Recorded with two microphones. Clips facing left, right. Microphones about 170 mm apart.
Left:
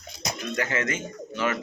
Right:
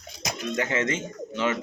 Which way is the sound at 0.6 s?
25° right (ahead or behind).